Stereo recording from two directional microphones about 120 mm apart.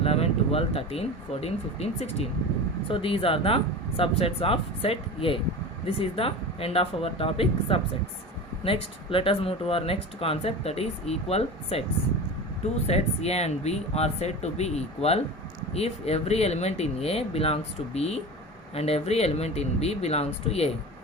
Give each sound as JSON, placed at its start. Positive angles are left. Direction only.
{"t": 0.0, "sound": "speech", "side_deg": 55}
{"t": 12.9, "sound": "speech", "side_deg": 60}